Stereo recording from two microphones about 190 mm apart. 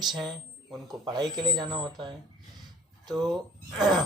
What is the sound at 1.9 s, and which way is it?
Speech, 20° right (ahead or behind).